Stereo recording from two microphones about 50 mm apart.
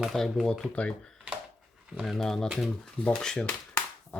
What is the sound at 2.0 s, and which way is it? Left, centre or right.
Speech, centre.